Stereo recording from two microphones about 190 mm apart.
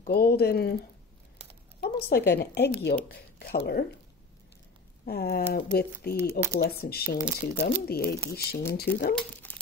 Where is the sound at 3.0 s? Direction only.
55° left (ahead or behind).